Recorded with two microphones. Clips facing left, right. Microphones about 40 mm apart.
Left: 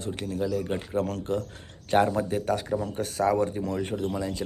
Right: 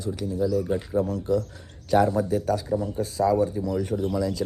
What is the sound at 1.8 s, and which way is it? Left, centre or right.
Speech, left.